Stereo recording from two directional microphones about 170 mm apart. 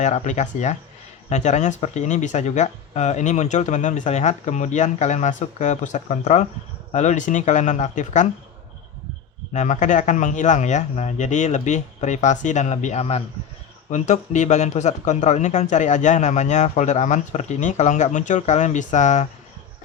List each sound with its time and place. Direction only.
0.0 s speech: 45° left (ahead or behind)
9.5 s speech: 45° left (ahead or behind)